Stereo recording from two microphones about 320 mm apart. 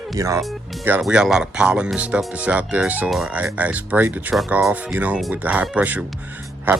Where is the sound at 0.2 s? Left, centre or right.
Centre.